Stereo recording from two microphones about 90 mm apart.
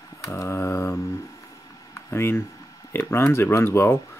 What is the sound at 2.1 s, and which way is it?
Speech, 25° left (ahead or behind).